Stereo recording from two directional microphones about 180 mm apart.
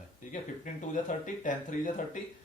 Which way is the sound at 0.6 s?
45° left (ahead or behind).